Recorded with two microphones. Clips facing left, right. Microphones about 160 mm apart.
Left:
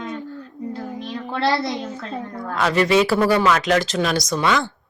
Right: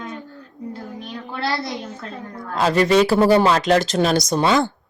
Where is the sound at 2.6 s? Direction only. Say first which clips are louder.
Right 2 dB; 35° right (ahead or behind).